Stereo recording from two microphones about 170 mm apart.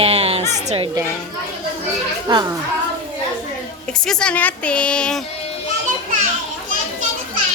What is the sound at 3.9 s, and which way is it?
A woman's voice, 5° left (ahead or behind).